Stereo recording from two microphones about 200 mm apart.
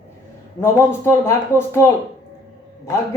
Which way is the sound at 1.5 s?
15° left (ahead or behind).